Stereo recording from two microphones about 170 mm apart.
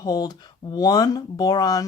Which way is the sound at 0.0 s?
20° left (ahead or behind).